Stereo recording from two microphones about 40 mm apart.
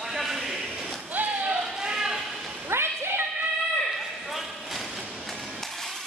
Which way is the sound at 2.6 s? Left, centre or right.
Right.